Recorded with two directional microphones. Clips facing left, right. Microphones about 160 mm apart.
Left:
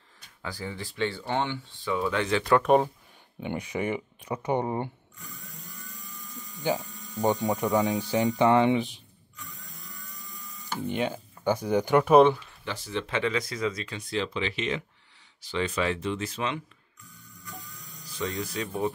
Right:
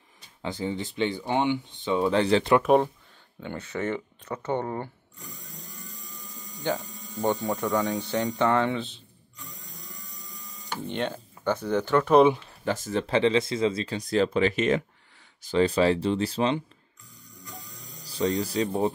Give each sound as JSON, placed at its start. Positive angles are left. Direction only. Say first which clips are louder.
{"t": 0.4, "sound": "speech", "louder": "right 6 dB", "side_deg": -20}
{"t": 2.6, "sound": "speech", "louder": "right 1 dB", "side_deg": 0}
{"t": 3.3, "sound": "speech", "louder": "left 2 dB", "side_deg": 15}
{"t": 6.6, "sound": "speech", "louder": "left 1 dB", "side_deg": 5}
{"t": 7.2, "sound": "speech", "louder": "left 1 dB", "side_deg": 20}
{"t": 10.3, "sound": "speech", "louder": "left 1 dB", "side_deg": 5}
{"t": 12.4, "sound": "speech", "louder": "right 8 dB", "side_deg": -45}
{"t": 15.4, "sound": "speech", "louder": "right 7 dB", "side_deg": -35}
{"t": 17.8, "sound": "speech", "louder": "right 7 dB", "side_deg": -35}